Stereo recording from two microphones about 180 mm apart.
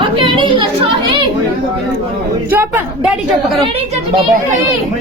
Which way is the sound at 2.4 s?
10° right (ahead or behind).